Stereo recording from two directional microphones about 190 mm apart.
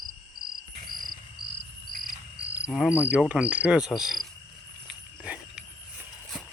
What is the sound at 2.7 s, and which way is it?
Cricket, 5° right (ahead or behind).